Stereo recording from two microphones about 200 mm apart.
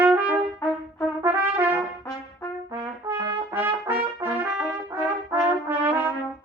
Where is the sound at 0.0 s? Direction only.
5° right (ahead or behind).